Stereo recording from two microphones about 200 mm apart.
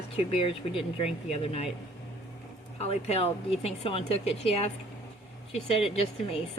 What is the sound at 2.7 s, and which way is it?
Speech, 30° left (ahead or behind).